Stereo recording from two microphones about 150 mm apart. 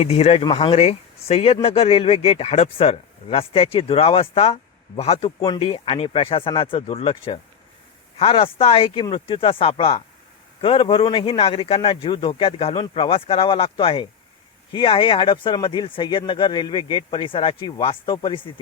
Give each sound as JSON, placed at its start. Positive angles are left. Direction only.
{"t": 0.0, "sound": "speech", "side_deg": 45}